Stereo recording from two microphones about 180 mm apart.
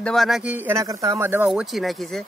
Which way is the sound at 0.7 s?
15° right (ahead or behind).